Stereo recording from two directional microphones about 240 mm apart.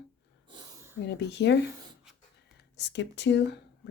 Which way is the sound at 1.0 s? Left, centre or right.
Left.